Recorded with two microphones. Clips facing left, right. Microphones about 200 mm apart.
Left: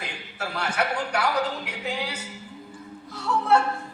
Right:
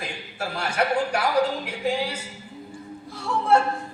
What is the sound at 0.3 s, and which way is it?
A woman's voice, 25° right (ahead or behind).